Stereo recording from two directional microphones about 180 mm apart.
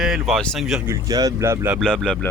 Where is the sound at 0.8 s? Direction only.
20° right (ahead or behind).